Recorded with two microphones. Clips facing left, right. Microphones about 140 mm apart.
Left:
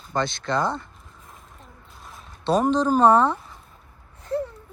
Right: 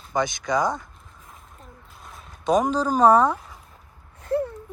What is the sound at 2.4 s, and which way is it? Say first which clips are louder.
Speech: left 1 dB; 15° right (ahead or behind).